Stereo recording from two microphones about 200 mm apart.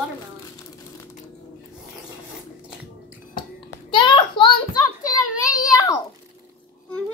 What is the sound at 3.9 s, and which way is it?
Speech, 25° left (ahead or behind).